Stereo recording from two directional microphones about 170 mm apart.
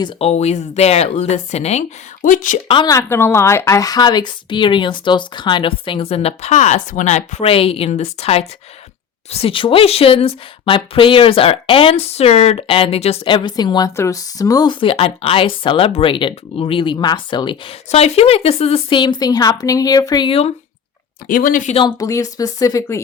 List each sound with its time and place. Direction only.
0.0 s speech: 40° left (ahead or behind)
2.2 s speech: 50° left (ahead or behind)
2.6 s a woman's voice: 30° left (ahead or behind)
2.9 s a woman's voice: 15° left (ahead or behind); by 20.5 s 30° left (ahead or behind)
21.2 s speech: 55° left (ahead or behind)
21.8 s a woman's voice: 25° left (ahead or behind)